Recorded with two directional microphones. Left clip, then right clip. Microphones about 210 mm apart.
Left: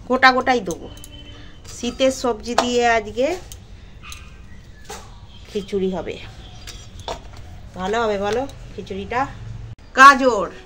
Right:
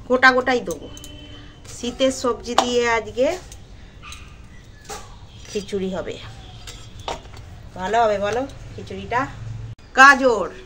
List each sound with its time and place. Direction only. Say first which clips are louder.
0.1 s speech: left 1 dB; 35° left (ahead or behind)
1.8 s speech: left 2 dB; 35° left (ahead or behind)
5.5 s speech: left 3 dB; 10° left (ahead or behind)
6.0 s speech: left 1 dB; 25° left (ahead or behind)
7.7 s speech: right 2 dB; 25° left (ahead or behind)